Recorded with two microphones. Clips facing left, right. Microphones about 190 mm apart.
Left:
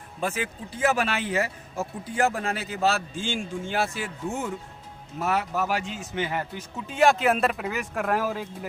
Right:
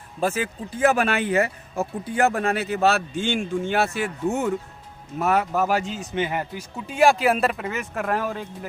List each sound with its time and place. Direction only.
0.2 s speech: 45° right (ahead or behind); by 4.5 s 65° right (ahead or behind)
5.2 s speech: 55° right (ahead or behind)
6.1 s speech: 15° right (ahead or behind); by 8.4 s 5° left (ahead or behind)